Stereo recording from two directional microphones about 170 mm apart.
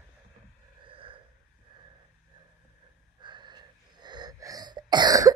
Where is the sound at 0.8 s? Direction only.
30° right (ahead or behind).